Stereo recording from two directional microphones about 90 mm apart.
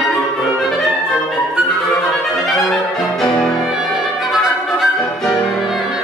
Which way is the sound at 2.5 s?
Centre (ahead or behind).